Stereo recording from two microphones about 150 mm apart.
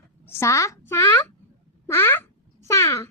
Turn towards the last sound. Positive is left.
turn(degrees=20)  # may be behind; listen again after turning